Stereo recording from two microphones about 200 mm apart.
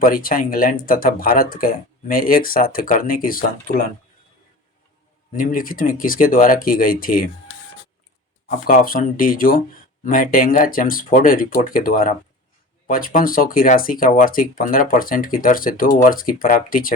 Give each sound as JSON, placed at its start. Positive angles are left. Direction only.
{"t": 0.0, "sound": "speech", "side_deg": 45}
{"t": 5.4, "sound": "speech", "side_deg": 45}
{"t": 8.4, "sound": "speech", "side_deg": 45}